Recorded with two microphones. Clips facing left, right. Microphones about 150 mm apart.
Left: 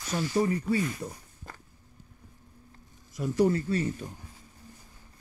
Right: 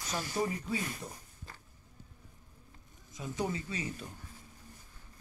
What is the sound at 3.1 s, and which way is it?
Speech, 70° left (ahead or behind).